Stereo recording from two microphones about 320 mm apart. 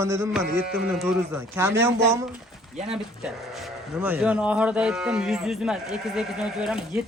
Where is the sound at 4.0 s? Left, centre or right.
Centre.